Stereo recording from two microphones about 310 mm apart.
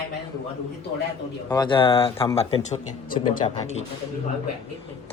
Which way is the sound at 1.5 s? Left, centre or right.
Centre.